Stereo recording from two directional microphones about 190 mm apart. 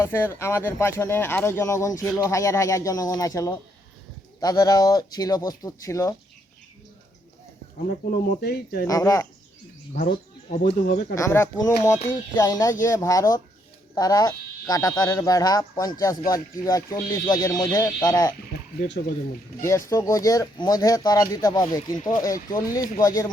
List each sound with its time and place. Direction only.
0.0 s speech: 10° left (ahead or behind)
7.9 s speech: 50° left (ahead or behind)
8.9 s speech: 15° left (ahead or behind)
9.9 s speech: 45° left (ahead or behind)
11.1 s speech: 15° left (ahead or behind)
19.6 s speech: 15° left (ahead or behind)
21.9 s speech: 45° left (ahead or behind)
22.2 s speech: 20° left (ahead or behind)